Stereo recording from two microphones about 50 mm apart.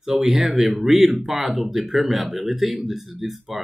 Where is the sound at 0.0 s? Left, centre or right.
Centre.